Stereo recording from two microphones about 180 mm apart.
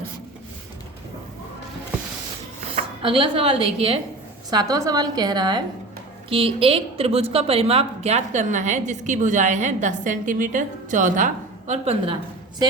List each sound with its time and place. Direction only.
3.0 s a woman's voice: 30° right (ahead or behind)
4.5 s a woman's voice: 20° right (ahead or behind); by 11.3 s 45° right (ahead or behind)
11.7 s a woman's voice: 35° right (ahead or behind)